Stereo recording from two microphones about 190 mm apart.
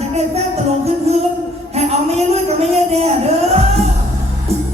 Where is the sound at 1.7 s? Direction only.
35° right (ahead or behind).